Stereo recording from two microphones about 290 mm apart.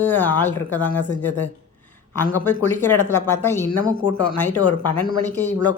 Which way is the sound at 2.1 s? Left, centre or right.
Centre.